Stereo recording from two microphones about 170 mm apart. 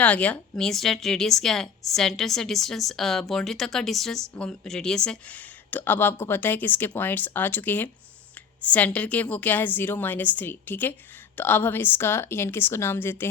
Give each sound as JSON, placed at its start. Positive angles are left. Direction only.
{"t": 0.0, "sound": "a woman's voice", "side_deg": 10}